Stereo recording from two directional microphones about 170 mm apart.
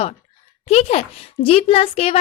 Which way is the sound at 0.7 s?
40° left (ahead or behind).